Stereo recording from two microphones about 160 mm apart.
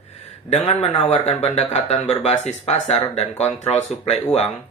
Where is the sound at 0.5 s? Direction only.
40° left (ahead or behind).